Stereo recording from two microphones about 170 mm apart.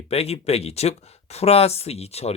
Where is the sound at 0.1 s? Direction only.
35° left (ahead or behind).